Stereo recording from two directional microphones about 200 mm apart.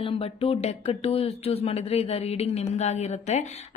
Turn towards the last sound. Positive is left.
turn(degrees=35)  # may be behind; listen again after turning